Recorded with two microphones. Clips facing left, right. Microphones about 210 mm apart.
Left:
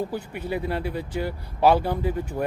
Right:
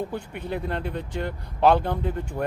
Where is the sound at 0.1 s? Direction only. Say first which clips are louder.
Left 2 dB; 5° left (ahead or behind).